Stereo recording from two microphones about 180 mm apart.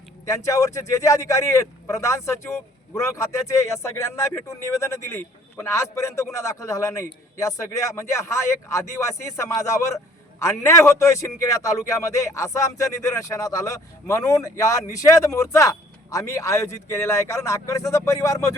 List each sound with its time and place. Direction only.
0.3 s speech: 15° left (ahead or behind)